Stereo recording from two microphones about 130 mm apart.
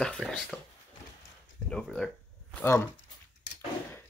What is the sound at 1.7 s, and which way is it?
Speech, 5° left (ahead or behind).